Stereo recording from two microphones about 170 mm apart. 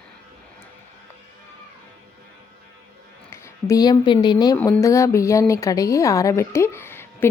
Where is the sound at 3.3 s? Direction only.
15° left (ahead or behind).